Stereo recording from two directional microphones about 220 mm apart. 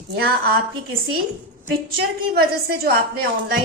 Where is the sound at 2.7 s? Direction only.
45° right (ahead or behind).